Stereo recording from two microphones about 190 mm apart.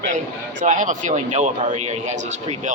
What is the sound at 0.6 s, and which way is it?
Speech, 40° right (ahead or behind).